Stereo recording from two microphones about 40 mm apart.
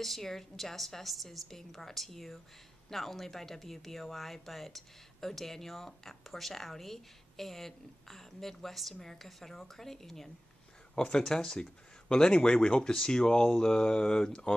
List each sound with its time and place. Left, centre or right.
0.0 s speech: centre
11.0 s speech: centre